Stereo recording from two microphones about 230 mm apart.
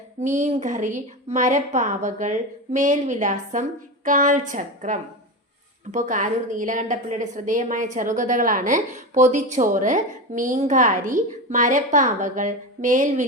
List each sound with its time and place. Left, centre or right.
0.2 s a woman's voice: right